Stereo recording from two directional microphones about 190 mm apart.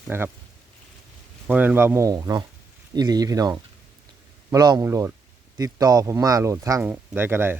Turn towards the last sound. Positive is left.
turn(degrees=-10)  # may be behind; listen again after turning